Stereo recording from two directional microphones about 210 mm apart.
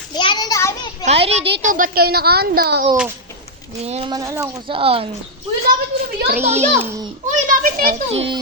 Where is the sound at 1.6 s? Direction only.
40° right (ahead or behind).